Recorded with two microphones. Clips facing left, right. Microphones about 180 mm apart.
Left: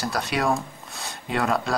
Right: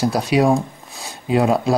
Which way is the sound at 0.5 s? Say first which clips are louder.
Right 8 dB; centre (ahead or behind).